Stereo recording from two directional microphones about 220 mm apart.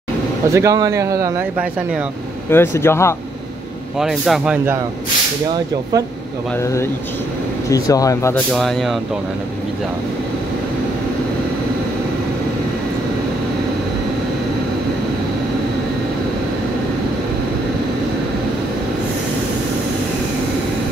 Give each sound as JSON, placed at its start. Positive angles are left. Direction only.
{"t": 0.5, "sound": "a man's voice", "side_deg": -15}
{"t": 2.5, "sound": "speech", "side_deg": 10}
{"t": 4.0, "sound": "speech", "side_deg": 0}
{"t": 6.6, "sound": "speech", "side_deg": 15}
{"t": 8.5, "sound": "speech", "side_deg": 0}